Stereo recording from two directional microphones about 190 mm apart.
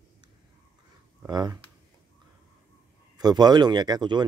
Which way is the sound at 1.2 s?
20° right (ahead or behind).